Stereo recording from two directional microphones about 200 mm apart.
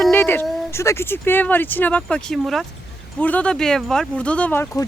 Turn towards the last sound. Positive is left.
turn(degrees=10)  # may be behind; listen again after turning